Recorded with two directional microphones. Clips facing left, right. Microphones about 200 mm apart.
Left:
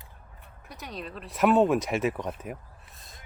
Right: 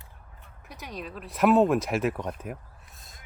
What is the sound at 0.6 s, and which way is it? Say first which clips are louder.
Speech: even; centre (ahead or behind).